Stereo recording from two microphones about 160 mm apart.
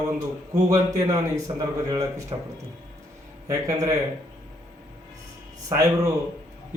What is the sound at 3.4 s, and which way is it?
Speech, 20° right (ahead or behind).